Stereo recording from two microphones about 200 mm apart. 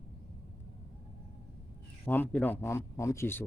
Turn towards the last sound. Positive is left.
turn(degrees=10)  # may be behind; listen again after turning